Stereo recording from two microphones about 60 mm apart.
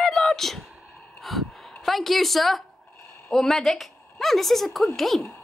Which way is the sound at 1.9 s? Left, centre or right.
Centre.